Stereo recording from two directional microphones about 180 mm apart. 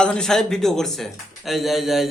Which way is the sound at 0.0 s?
5° left (ahead or behind).